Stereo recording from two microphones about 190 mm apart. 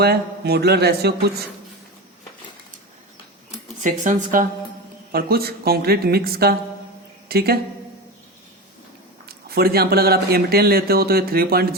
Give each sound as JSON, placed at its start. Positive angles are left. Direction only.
{"t": 0.0, "sound": "a man's voice", "side_deg": -55}
{"t": 3.8, "sound": "speech", "side_deg": -40}
{"t": 5.1, "sound": "speech", "side_deg": -55}
{"t": 9.5, "sound": "speech", "side_deg": -55}